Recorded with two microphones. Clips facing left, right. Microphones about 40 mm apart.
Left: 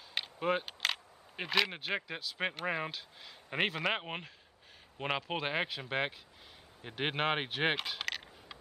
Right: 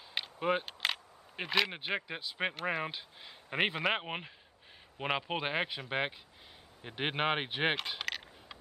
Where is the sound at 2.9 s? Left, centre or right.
Centre.